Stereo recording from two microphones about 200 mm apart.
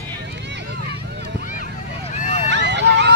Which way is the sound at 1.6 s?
40° left (ahead or behind).